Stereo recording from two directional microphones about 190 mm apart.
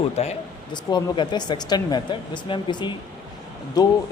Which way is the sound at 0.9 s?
25° left (ahead or behind).